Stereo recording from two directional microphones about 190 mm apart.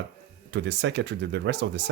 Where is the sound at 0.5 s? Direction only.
65° right (ahead or behind).